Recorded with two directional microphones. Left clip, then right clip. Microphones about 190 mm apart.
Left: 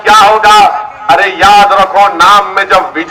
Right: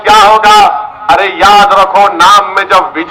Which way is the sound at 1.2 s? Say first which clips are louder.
Left 1 dB; 45° left (ahead or behind).